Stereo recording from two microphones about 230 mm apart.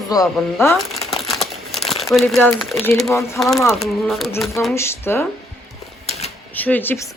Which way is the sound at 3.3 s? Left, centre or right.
Centre.